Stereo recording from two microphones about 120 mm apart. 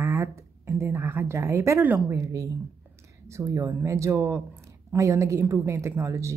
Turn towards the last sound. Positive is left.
turn(degrees=-25)  # may be behind; listen again after turning